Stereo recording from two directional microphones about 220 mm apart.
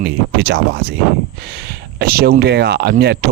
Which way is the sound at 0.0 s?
50° right (ahead or behind).